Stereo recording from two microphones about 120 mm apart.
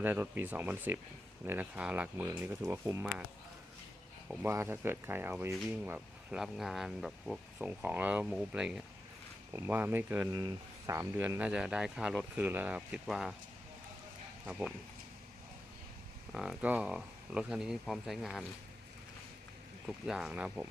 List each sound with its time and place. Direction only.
0.0 s speech: 15° right (ahead or behind)
4.4 s speech: 20° right (ahead or behind)
6.4 s speech: centre (ahead or behind)
9.5 s speech: 20° right (ahead or behind)
10.3 s speech: 30° right (ahead or behind)
11.3 s speech: 10° right (ahead or behind)
16.3 s speech: 5° right (ahead or behind)
19.9 s speech: 5° right (ahead or behind)